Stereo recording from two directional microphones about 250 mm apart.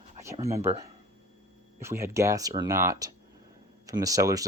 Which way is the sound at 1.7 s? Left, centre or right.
Centre.